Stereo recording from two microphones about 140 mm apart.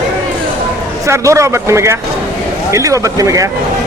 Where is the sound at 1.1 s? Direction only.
20° right (ahead or behind).